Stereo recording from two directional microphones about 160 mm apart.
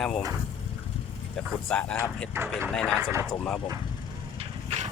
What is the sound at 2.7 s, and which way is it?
Speech, 5° left (ahead or behind).